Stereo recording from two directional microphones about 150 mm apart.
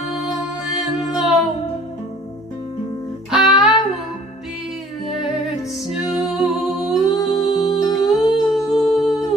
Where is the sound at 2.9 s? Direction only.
35° left (ahead or behind).